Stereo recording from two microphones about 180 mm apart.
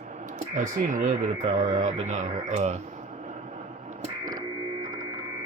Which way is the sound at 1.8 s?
40° right (ahead or behind).